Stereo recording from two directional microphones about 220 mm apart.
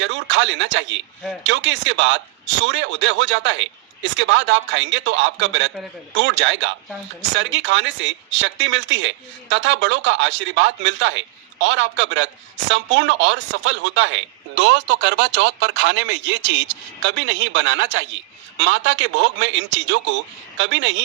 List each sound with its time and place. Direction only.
0.0 s speech: 60° right (ahead or behind)